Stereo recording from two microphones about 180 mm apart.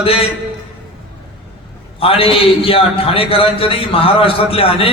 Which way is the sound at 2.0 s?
30° left (ahead or behind).